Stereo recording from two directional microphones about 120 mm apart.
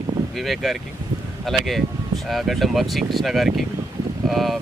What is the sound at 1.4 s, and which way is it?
Speech, centre (ahead or behind).